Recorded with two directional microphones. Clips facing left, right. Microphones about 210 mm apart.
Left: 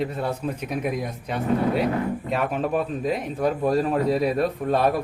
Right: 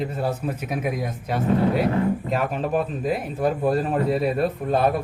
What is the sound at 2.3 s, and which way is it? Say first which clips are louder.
Speech: even; centre (ahead or behind).